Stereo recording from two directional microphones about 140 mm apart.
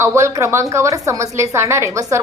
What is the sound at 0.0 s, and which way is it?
A woman's voice, 20° right (ahead or behind).